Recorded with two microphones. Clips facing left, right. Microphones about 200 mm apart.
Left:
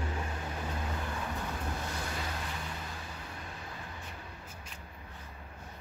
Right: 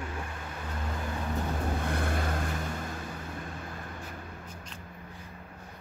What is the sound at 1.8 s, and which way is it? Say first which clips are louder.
Vehicle: right 7 dB; 55° right (ahead or behind).